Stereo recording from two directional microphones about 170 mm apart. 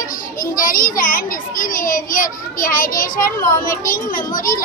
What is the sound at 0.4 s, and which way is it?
A child's voice, 55° left (ahead or behind).